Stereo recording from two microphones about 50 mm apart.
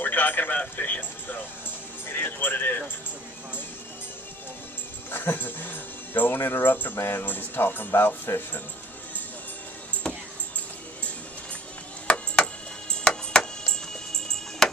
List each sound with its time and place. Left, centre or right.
0.0 s speech: left
5.1 s speech: left
7.0 s speech: left
10.0 s a sound: centre
12.1 s a sound: left
12.9 s music: centre